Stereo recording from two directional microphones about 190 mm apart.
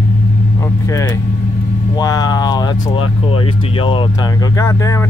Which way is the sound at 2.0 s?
20° left (ahead or behind).